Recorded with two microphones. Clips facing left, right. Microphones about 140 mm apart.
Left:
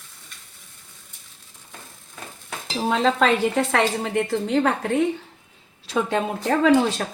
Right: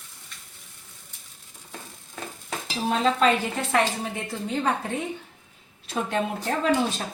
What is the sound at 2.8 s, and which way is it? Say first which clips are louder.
A woman's voice: left 2 dB; 90° left.